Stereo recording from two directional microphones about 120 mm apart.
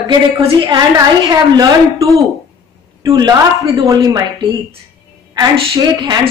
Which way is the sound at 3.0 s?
35° right (ahead or behind).